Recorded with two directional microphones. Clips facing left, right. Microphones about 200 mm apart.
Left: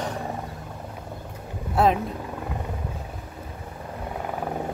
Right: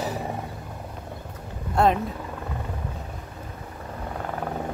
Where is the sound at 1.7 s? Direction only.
Centre (ahead or behind).